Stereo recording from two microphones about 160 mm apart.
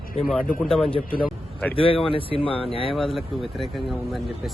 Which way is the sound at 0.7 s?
Centre (ahead or behind).